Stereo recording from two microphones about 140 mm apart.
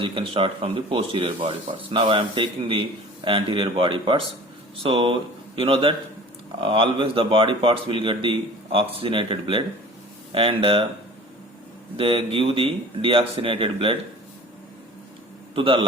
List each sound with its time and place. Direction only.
0.0 s speech: 40° right (ahead or behind)
11.9 s speech: 40° right (ahead or behind)
15.5 s speech: 40° right (ahead or behind)